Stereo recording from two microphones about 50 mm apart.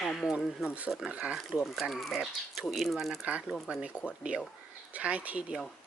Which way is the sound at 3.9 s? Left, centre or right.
Right.